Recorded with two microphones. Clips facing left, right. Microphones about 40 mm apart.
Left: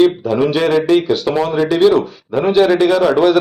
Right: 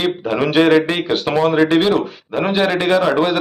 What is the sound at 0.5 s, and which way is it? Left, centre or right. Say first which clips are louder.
A man's voice: right 2 dB; right.